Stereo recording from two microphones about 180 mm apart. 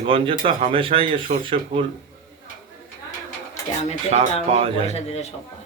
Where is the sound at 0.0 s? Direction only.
30° right (ahead or behind).